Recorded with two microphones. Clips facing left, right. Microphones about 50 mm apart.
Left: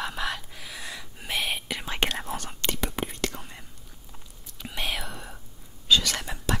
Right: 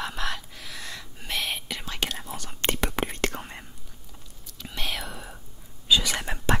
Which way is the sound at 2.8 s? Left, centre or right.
Right.